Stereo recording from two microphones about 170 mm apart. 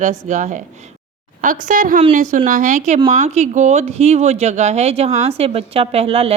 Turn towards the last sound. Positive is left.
turn(degrees=-35)  # may be behind; listen again after turning